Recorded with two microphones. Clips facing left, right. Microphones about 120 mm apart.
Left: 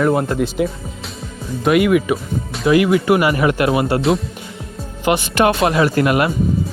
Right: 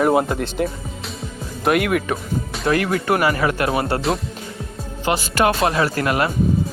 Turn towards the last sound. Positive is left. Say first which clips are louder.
# left 4 dB
turn(degrees=20)  # may be behind; listen again after turning